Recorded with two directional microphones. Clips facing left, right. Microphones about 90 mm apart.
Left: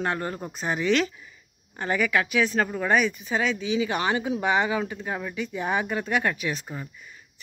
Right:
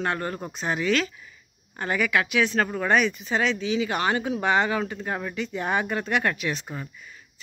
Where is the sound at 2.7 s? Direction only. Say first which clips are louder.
Right 1 dB; 5° left (ahead or behind).